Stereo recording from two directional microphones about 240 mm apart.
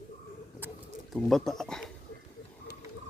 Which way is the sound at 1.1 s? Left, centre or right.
Centre.